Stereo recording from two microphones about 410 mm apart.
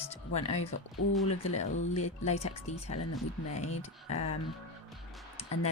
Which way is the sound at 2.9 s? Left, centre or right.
Left.